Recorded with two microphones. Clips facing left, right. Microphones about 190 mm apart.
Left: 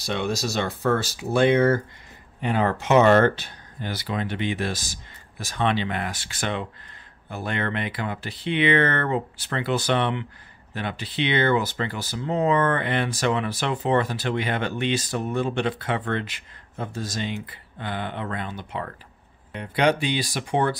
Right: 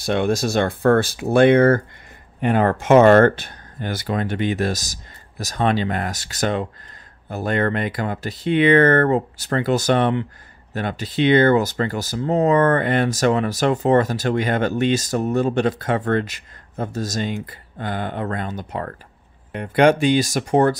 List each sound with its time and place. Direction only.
0.0 s speech: 50° right (ahead or behind)